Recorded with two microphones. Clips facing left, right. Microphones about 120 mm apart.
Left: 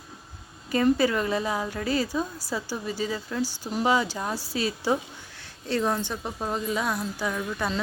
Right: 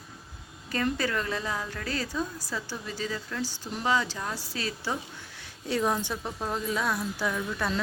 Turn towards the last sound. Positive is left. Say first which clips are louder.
# left 1 dB
turn(degrees=5)  # may be behind; listen again after turning